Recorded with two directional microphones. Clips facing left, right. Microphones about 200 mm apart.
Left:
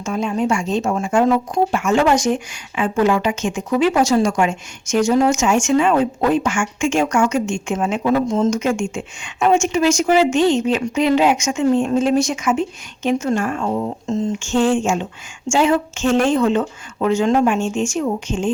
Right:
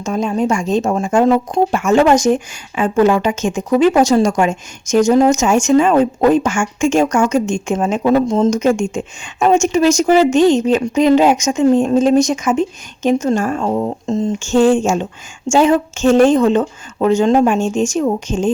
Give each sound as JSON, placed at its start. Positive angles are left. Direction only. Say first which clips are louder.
{"t": 0.0, "sound": "a woman's voice", "louder": "right 3 dB", "side_deg": -40}
{"t": 1.8, "sound": "a woman's voice", "louder": "right 6 dB", "side_deg": -40}